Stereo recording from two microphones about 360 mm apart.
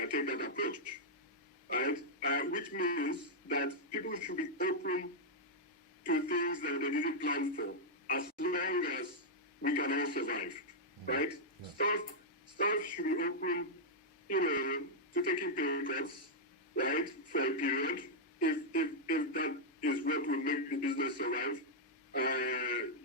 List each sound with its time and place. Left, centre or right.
0.0 s speech: left
6.1 s speech: left